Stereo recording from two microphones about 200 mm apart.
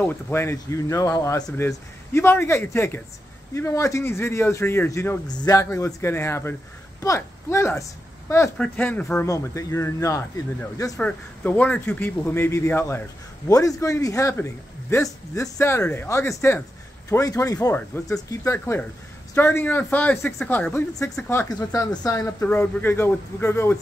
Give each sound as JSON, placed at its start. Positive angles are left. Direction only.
{"t": 0.0, "sound": "speech", "side_deg": 10}